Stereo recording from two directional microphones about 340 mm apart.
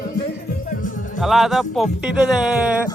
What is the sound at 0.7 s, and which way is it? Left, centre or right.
Music, left.